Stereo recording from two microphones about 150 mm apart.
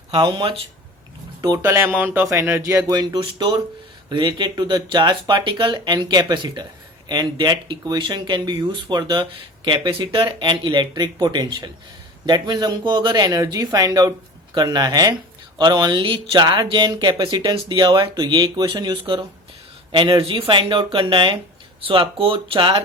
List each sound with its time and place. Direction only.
0.1 s speech: 30° right (ahead or behind)
1.4 s speech: 20° right (ahead or behind); by 22.8 s 35° right (ahead or behind)